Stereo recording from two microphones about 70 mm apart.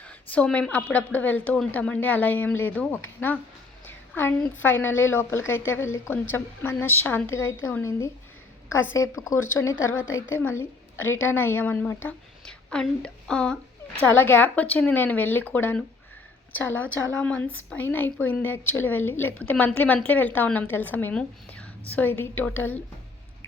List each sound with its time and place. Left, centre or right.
0.0 s a sound: left
0.4 s a woman's voice: centre; by 10.0 s left
11.1 s a woman's voice: left
12.5 s a woman's voice: centre
14.0 s a woman's voice: left
17.8 s a woman's voice: left